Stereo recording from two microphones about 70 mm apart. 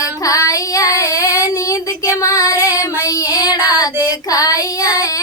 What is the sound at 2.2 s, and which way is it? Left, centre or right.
Female singing, left.